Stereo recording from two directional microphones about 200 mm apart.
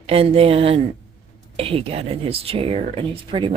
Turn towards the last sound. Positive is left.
turn(degrees=-25)  # may be behind; listen again after turning